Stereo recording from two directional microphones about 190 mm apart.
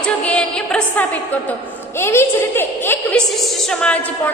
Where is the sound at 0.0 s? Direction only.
5° left (ahead or behind).